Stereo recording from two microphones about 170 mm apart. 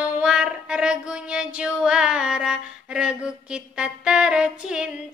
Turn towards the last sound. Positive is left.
turn(degrees=-5)  # may be behind; listen again after turning